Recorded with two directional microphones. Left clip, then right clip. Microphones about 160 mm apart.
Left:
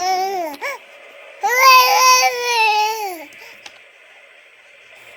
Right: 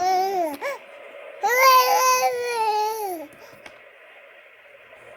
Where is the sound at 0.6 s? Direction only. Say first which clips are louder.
Left 3 dB; 15° right (ahead or behind).